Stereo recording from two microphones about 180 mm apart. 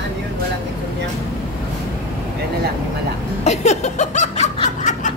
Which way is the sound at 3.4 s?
40° left (ahead or behind).